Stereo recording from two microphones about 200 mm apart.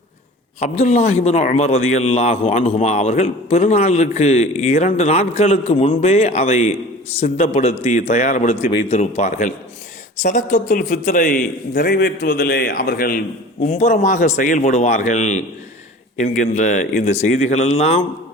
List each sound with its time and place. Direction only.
0.6 s a man's voice: 35° left (ahead or behind)